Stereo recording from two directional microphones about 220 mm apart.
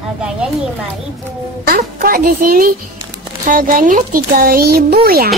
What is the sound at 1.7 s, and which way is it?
A child's voice, 40° right (ahead or behind).